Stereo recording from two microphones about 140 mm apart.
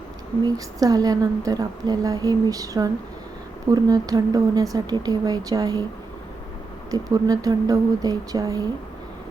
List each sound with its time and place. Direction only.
0.4 s speech: 25° right (ahead or behind)
6.9 s speech: 25° right (ahead or behind)